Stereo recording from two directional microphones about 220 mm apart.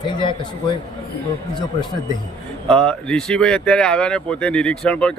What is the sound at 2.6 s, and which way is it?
Speech, 5° left (ahead or behind).